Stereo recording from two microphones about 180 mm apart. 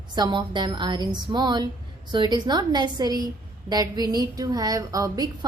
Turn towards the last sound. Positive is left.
turn(degrees=-20)  # may be behind; listen again after turning